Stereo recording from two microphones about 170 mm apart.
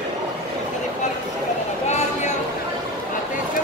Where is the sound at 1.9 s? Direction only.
45° left (ahead or behind).